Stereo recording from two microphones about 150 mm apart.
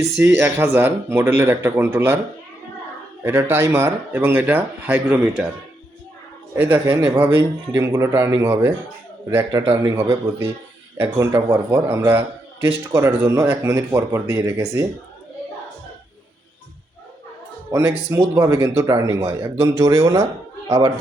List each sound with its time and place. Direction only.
0.2 s speech: 15° right (ahead or behind)
3.2 s speech: 15° right (ahead or behind)
6.5 s speech: 15° right (ahead or behind)
17.7 s speech: 15° right (ahead or behind)